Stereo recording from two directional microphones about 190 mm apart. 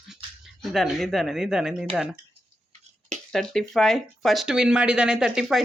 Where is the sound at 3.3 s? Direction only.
Centre (ahead or behind).